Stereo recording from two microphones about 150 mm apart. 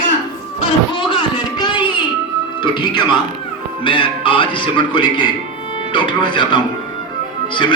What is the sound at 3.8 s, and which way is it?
Speech, 35° left (ahead or behind).